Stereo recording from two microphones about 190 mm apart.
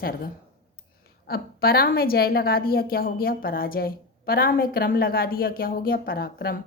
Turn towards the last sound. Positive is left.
turn(degrees=50)  # may be behind; listen again after turning